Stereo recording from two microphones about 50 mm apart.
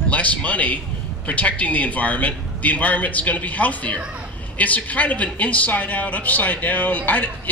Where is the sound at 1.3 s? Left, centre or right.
Left.